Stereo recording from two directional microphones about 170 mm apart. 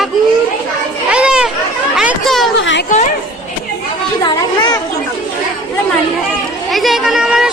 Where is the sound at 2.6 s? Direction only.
90° left.